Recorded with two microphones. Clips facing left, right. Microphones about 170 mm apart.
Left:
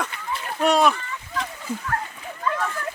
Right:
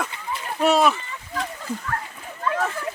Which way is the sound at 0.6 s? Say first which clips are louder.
Even; 5° right (ahead or behind).